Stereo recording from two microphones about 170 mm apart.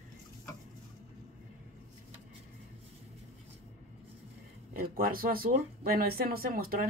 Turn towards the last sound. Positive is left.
turn(degrees=-60)  # may be behind; listen again after turning